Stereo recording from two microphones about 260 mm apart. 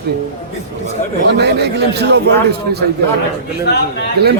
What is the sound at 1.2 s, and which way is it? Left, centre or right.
A man's voice, right.